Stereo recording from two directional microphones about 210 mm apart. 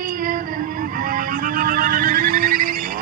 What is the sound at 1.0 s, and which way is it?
Music, 40° right (ahead or behind).